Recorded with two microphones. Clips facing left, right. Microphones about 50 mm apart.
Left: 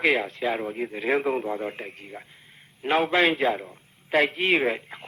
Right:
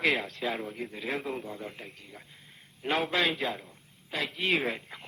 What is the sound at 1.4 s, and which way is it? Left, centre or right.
Speech, left.